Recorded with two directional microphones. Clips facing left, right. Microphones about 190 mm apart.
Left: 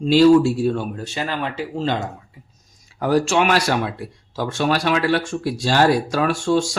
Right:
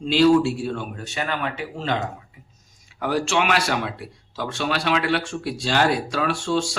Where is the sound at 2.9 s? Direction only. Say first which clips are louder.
Left 5 dB; 40° left (ahead or behind).